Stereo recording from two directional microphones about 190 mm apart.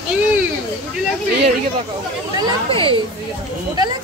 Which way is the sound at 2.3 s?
25° right (ahead or behind).